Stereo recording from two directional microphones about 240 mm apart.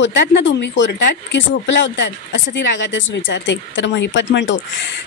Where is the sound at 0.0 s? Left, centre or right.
Left.